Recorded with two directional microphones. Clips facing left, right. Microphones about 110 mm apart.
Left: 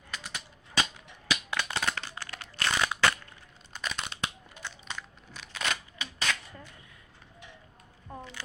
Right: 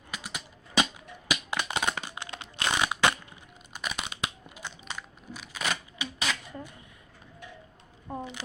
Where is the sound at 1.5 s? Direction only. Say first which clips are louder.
Right 3 dB; 15° right (ahead or behind).